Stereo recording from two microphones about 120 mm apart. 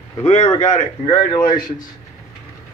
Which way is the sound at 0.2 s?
60° left (ahead or behind).